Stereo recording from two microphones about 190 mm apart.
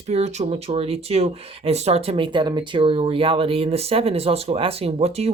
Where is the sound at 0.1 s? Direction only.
35° right (ahead or behind).